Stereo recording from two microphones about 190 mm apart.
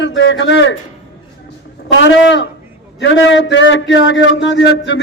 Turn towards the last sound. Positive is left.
turn(degrees=65)  # may be behind; listen again after turning